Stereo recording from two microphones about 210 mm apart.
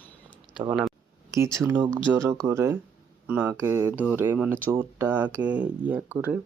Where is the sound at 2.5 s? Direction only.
10° right (ahead or behind).